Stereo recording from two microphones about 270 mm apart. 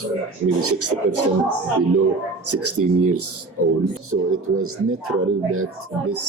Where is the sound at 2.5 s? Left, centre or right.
Right.